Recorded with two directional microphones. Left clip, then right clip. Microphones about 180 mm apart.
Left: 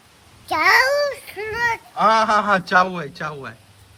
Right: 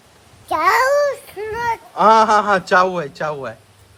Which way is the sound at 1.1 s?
55° right (ahead or behind).